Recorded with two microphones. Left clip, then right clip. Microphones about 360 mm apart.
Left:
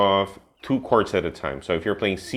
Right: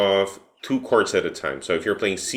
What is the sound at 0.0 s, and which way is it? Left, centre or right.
Speech, left.